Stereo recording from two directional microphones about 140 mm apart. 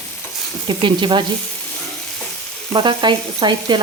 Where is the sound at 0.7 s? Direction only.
35° right (ahead or behind).